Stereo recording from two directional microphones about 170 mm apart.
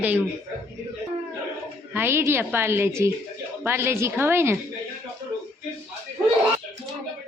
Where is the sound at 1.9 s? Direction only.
15° right (ahead or behind).